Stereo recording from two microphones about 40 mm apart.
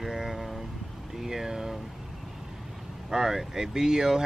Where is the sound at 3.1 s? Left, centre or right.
Centre.